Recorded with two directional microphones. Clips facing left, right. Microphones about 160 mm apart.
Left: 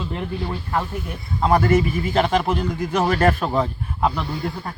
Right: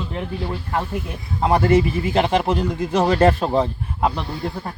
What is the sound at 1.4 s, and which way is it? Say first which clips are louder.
Speech: right 1 dB; 20° right (ahead or behind).